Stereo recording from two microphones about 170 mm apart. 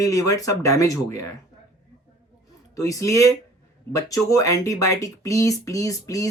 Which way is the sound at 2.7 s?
20° left (ahead or behind).